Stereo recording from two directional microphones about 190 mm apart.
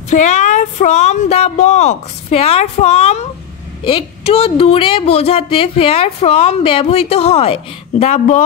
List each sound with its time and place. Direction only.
0.1 s a woman's voice: 40° left (ahead or behind)